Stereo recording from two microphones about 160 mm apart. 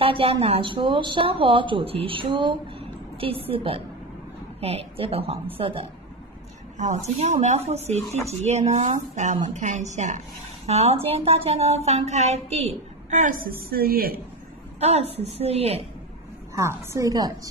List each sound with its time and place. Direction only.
0.0 s a woman's voice: 35° right (ahead or behind)
6.8 s a woman's voice: 45° right (ahead or behind); by 14.2 s 65° right (ahead or behind)
14.8 s a woman's voice: 40° right (ahead or behind)
16.5 s a woman's voice: 20° right (ahead or behind)